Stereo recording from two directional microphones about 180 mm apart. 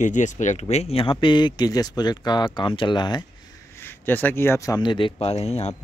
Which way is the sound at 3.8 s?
10° left (ahead or behind).